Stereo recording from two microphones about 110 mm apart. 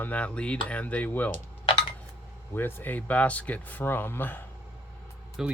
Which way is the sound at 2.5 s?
20° left (ahead or behind).